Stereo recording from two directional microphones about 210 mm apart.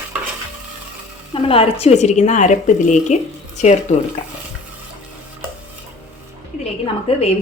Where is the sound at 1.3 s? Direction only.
25° left (ahead or behind).